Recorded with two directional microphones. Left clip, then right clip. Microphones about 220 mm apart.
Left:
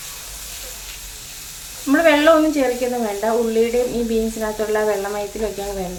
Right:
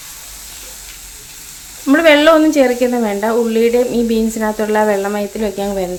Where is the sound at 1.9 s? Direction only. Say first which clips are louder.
Right 4 dB; 50° right (ahead or behind).